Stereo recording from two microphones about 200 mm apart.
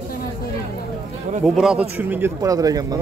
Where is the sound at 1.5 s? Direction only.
5° right (ahead or behind); by 2.9 s 20° right (ahead or behind).